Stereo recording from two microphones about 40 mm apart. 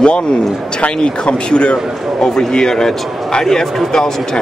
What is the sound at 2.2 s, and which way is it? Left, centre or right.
A man's voice, centre.